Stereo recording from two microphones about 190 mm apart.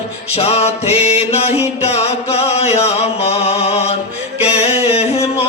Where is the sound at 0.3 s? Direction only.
30° left (ahead or behind).